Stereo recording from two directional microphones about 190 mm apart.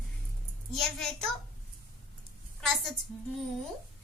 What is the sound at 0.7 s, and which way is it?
Speech, centre (ahead or behind).